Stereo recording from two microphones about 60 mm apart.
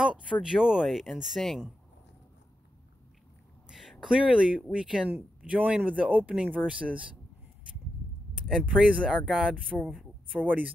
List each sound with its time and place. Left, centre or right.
0.0 s speech: centre
3.6 s a sound: centre
4.0 s speech: centre
5.1 s speech: right
8.5 s speech: centre
10.3 s speech: right